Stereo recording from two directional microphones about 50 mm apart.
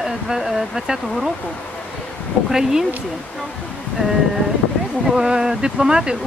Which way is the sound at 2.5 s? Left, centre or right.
Centre.